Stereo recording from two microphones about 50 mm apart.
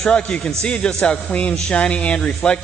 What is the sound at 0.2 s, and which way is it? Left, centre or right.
A man's voice, left.